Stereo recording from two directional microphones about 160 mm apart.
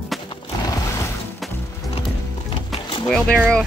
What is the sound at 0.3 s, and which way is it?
Music, 20° left (ahead or behind).